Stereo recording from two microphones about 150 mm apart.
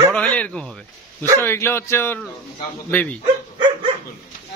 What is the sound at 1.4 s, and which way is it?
A man's voice, 15° left (ahead or behind).